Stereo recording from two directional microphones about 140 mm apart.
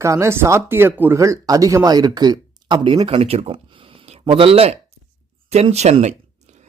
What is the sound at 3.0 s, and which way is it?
Speech, 45° right (ahead or behind).